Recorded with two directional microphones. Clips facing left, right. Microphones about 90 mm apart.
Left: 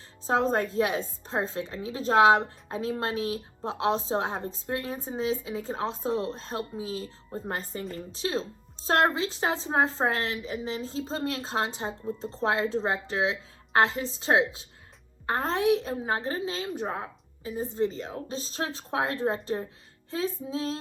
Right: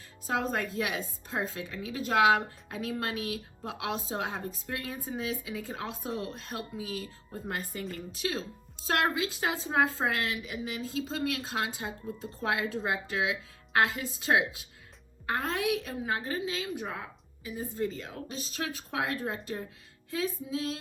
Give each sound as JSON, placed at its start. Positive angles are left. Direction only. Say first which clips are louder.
{"t": 0.3, "sound": "speech", "louder": "left 6 dB", "side_deg": 30}